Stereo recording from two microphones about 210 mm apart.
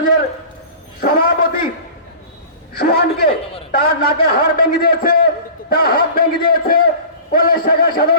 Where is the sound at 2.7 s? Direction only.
45° left (ahead or behind).